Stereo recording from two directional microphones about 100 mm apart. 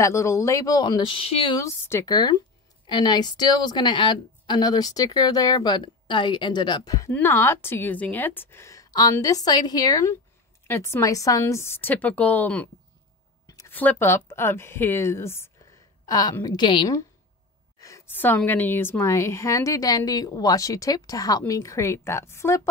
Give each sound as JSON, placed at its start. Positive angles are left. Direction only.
{"t": 0.0, "sound": "a woman's voice", "side_deg": 30}
{"t": 1.6, "sound": "a woman's voice", "side_deg": 25}
{"t": 2.0, "sound": "speech", "side_deg": 40}
{"t": 7.1, "sound": "a woman's voice", "side_deg": 20}
{"t": 13.7, "sound": "speech", "side_deg": 20}
{"t": 17.7, "sound": "a sound", "side_deg": 30}
{"t": 18.1, "sound": "a woman's voice", "side_deg": 20}